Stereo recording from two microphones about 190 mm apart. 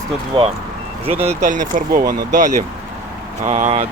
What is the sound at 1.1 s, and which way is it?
Speech, 30° right (ahead or behind).